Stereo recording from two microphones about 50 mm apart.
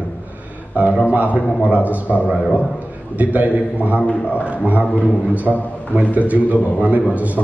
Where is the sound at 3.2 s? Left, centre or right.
Right.